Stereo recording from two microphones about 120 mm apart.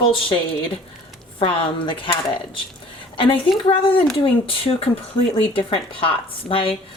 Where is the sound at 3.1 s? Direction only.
45° left (ahead or behind).